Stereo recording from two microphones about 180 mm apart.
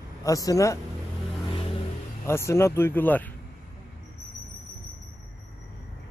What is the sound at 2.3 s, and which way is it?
Speech, 15° left (ahead or behind).